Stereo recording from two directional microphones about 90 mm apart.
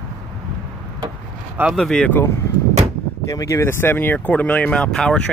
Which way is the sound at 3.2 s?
35° left (ahead or behind).